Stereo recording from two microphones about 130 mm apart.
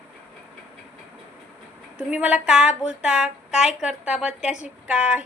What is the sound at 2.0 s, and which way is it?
A woman's voice, 10° right (ahead or behind).